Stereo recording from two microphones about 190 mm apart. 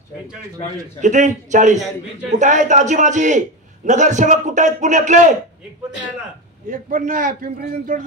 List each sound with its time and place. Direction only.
1.0 s a man's voice: 40° right (ahead or behind)
6.7 s a man's voice: 45° right (ahead or behind)